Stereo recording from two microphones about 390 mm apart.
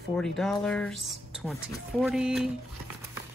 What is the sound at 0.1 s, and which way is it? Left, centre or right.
Speech, centre.